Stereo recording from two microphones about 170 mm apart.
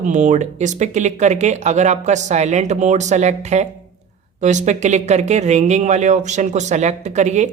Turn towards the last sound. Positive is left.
turn(degrees=-45)  # may be behind; listen again after turning